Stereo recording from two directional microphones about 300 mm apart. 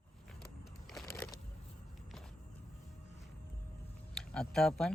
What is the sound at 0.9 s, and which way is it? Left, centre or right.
Crushing, centre.